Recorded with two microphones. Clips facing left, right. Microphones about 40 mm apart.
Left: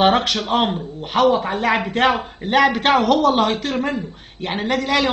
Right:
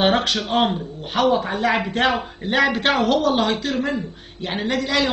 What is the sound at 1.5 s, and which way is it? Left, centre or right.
A man's voice, left.